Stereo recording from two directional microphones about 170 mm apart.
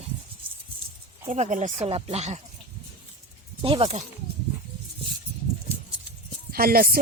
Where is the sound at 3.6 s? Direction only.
35° right (ahead or behind).